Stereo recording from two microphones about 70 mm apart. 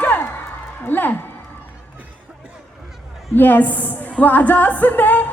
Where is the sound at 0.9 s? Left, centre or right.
Left.